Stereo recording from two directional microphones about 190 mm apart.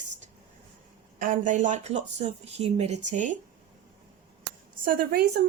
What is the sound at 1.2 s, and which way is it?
Speech, 45° right (ahead or behind).